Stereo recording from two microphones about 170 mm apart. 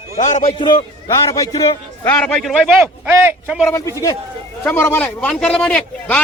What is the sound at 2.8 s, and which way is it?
Speech, 15° right (ahead or behind).